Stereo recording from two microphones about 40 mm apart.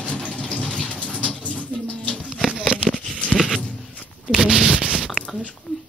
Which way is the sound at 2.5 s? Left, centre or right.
Right.